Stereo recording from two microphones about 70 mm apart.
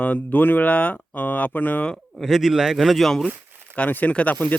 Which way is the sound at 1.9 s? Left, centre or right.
Centre.